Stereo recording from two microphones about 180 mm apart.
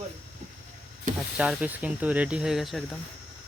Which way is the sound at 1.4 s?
5° right (ahead or behind).